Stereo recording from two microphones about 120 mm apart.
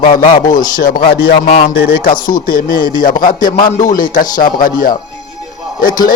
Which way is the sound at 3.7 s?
90° left.